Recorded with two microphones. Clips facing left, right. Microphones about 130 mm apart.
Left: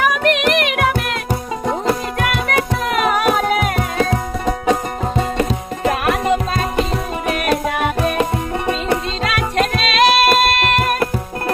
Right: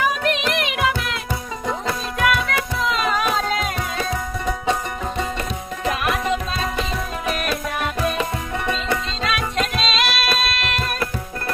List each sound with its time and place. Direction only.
0.0 s music: 65° left (ahead or behind); by 4.5 s 50° left (ahead or behind)
5.8 s music: 50° left (ahead or behind)